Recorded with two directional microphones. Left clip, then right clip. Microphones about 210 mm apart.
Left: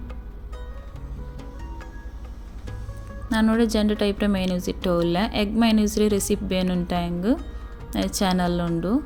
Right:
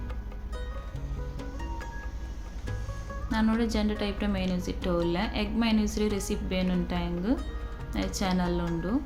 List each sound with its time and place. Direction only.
3.2 s a woman's voice: 35° left (ahead or behind)